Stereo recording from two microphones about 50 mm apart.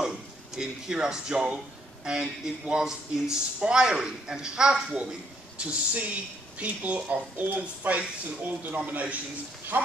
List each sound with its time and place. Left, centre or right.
0.6 s a man's voice: centre
5.6 s speech: right